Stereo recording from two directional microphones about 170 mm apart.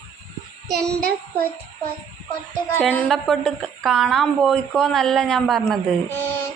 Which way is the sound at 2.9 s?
5° left (ahead or behind).